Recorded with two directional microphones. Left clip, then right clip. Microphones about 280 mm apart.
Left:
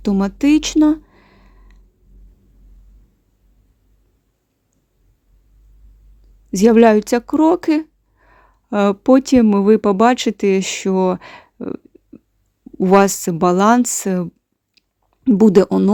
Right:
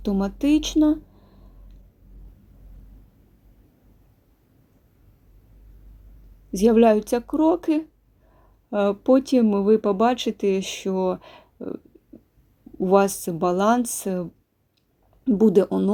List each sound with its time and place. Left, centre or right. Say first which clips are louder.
0.0 s speech: left 6 dB; left
0.6 s a sound: left 6 dB; left
6.6 s speech: left 6 dB; left
12.8 s speech: left 6 dB; left